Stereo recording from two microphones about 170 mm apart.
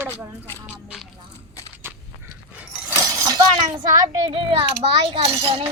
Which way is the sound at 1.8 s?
10° right (ahead or behind).